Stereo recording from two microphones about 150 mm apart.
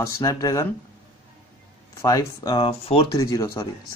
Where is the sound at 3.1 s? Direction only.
25° left (ahead or behind).